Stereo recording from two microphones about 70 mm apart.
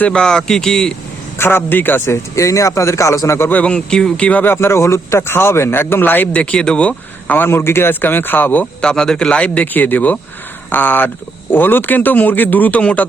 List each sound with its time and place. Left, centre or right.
0.0 s a man's voice: centre
1.4 s speech: left
2.3 s speech: left
3.5 s a man's voice: centre
4.5 s speech: left
6.3 s speech: centre
8.8 s a man's voice: centre